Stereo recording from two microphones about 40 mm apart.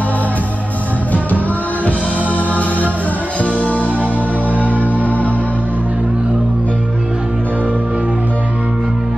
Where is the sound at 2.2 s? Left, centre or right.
Left.